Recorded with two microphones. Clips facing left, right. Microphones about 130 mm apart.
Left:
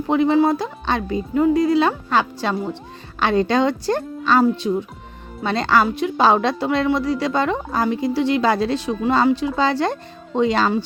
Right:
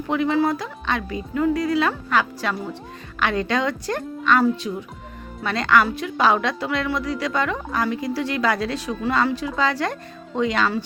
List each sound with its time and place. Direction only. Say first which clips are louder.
0.1 s a woman's voice: left 4 dB; 30° left (ahead or behind)